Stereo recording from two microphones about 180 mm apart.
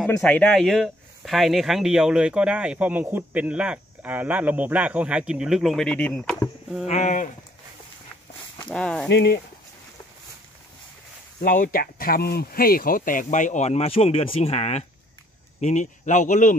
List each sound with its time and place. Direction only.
0.0 s speech: 5° left (ahead or behind)
6.9 s speech: 45° left (ahead or behind)
8.6 s speech: 5° left (ahead or behind)
9.1 s speech: 65° left (ahead or behind)
11.4 s speech: 50° left (ahead or behind)